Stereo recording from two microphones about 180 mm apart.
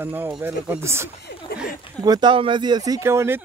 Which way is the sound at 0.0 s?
10° right (ahead or behind).